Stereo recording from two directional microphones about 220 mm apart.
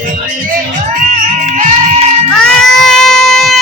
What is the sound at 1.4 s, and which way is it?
Music, 30° right (ahead or behind).